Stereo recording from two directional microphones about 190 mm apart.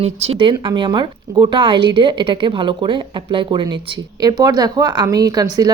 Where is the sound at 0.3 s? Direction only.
25° right (ahead or behind).